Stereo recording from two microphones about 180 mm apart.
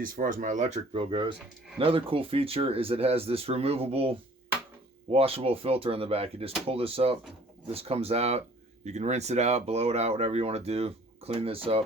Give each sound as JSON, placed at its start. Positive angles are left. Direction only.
{"t": 0.0, "sound": "speech", "side_deg": -50}